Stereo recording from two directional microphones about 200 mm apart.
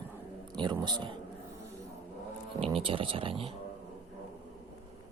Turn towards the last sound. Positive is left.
turn(degrees=-25)  # may be behind; listen again after turning